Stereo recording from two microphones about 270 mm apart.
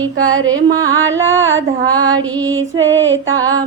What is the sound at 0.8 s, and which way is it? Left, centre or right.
Female singing, centre.